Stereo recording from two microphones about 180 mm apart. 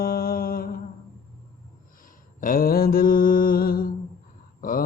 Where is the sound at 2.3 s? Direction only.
50° left (ahead or behind).